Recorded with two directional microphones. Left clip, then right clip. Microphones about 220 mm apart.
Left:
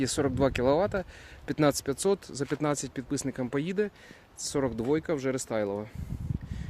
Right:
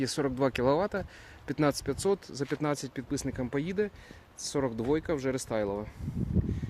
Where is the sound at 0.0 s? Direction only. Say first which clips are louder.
Left 2 dB; 15° left (ahead or behind).